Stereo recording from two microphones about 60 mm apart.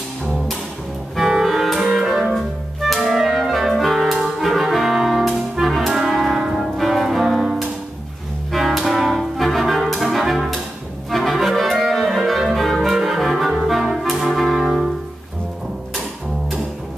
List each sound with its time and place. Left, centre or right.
1.1 s music: centre
11.1 s clarinet: centre
12.3 s music: centre
12.9 s clarinet: centre
14.2 s brass instrument: centre